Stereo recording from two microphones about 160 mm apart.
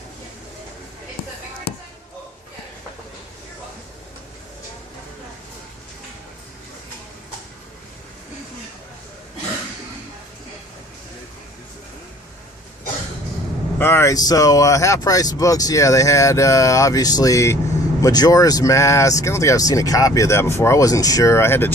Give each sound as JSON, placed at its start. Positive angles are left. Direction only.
{"t": 13.7, "sound": "speech", "side_deg": 15}